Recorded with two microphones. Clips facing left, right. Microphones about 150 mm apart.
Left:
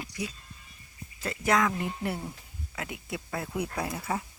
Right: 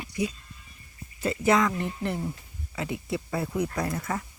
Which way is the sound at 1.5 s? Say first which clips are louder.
Right 2 dB; centre (ahead or behind).